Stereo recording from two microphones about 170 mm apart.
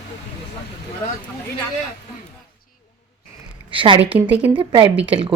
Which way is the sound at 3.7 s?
30° right (ahead or behind).